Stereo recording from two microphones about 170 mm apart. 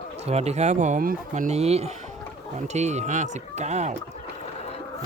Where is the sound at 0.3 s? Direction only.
40° right (ahead or behind).